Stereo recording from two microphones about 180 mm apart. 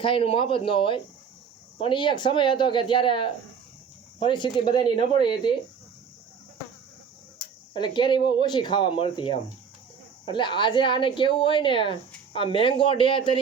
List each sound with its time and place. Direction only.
0.0 s a woman's voice: 30° left (ahead or behind)
7.7 s a woman's voice: 25° left (ahead or behind)